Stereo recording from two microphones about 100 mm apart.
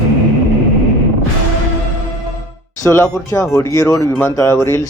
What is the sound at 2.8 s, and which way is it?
Speech, 30° left (ahead or behind).